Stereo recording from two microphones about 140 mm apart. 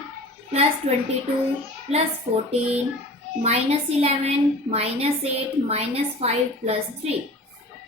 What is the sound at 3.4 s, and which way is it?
A woman's voice, 50° right (ahead or behind).